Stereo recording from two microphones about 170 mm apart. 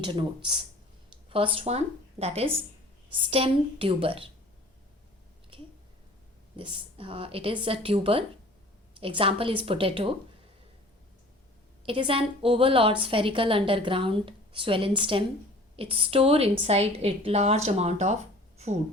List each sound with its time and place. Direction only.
0.0 s a woman's voice: 30° right (ahead or behind)
6.6 s a woman's voice: 35° right (ahead or behind)
11.9 s a woman's voice: 30° right (ahead or behind)